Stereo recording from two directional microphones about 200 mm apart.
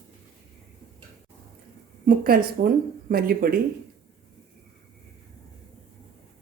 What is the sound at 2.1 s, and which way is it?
Speech, 45° right (ahead or behind).